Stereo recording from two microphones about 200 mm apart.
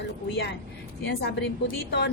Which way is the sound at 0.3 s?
60° left (ahead or behind).